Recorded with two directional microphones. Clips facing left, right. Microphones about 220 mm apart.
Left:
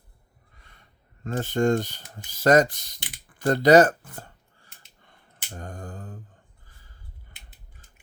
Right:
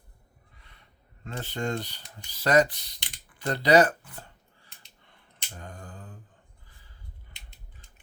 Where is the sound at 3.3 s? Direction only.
45° left (ahead or behind).